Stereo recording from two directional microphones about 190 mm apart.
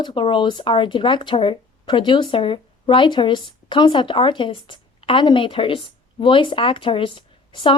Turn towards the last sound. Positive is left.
turn(degrees=25)  # may be behind; listen again after turning